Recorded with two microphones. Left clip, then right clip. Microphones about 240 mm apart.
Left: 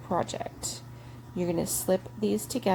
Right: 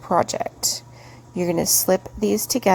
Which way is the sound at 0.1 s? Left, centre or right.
Right.